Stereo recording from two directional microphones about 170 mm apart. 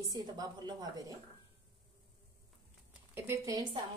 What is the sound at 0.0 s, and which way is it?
A woman's voice, 20° right (ahead or behind).